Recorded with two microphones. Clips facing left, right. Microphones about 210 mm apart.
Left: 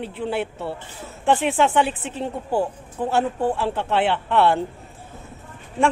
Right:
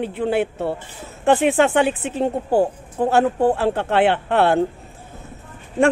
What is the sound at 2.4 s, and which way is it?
Speech, 40° right (ahead or behind).